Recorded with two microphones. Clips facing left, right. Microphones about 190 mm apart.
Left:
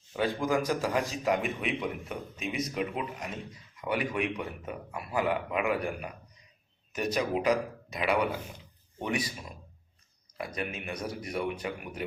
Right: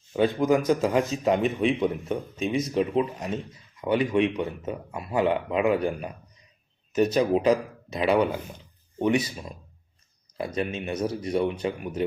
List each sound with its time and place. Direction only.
0.1 s speech: 25° right (ahead or behind)
10.3 s speech: 30° right (ahead or behind)